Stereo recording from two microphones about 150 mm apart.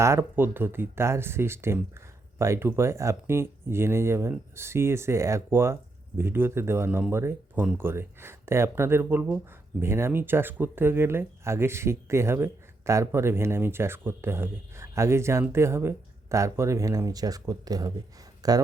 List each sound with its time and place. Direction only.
0.0 s speech: 15° right (ahead or behind)